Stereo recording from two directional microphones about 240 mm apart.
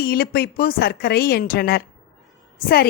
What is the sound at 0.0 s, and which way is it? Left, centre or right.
A woman's voice, left.